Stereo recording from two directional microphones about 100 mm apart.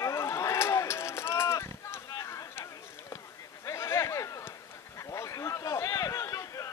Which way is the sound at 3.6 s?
30° left (ahead or behind).